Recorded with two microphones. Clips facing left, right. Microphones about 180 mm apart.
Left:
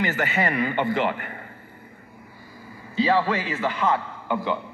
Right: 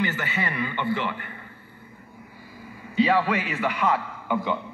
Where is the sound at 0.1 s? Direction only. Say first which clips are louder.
Left 5 dB; 60° left (ahead or behind).